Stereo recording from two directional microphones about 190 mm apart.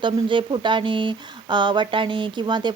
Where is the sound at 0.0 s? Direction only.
25° right (ahead or behind).